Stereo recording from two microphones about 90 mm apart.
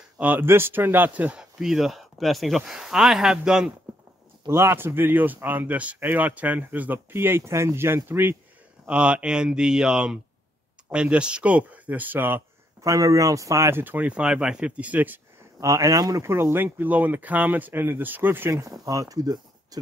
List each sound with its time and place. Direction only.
0.2 s speech: 20° right (ahead or behind)
4.5 s speech: 30° right (ahead or behind)
8.8 s speech: 10° right (ahead or behind)
12.8 s speech: 40° right (ahead or behind); by 15.1 s 20° right (ahead or behind)
15.6 s speech: 35° right (ahead or behind)
16.3 s speech: 25° right (ahead or behind)
18.6 s speech: 40° right (ahead or behind)